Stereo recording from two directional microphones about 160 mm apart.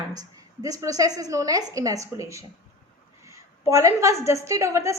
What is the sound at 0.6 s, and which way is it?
A woman's voice, 20° right (ahead or behind).